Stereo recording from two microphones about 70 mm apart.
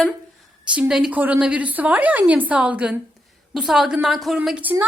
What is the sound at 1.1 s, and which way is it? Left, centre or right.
A woman's voice, right.